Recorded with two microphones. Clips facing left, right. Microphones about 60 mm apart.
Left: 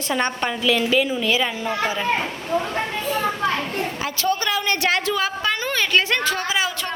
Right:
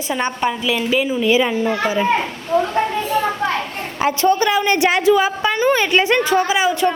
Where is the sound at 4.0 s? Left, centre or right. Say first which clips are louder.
Right 10 dB; right.